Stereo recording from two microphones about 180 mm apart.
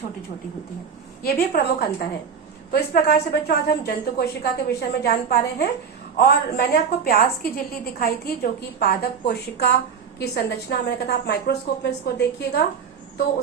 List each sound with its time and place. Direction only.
1.2 s a woman's voice: 60° left (ahead or behind)